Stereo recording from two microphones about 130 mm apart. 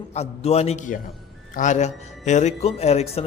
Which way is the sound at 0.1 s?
55° left (ahead or behind).